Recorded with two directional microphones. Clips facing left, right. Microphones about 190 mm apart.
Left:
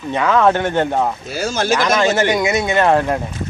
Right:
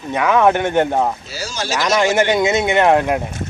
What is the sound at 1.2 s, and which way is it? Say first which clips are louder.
Speech: left 7 dB; 55° left (ahead or behind).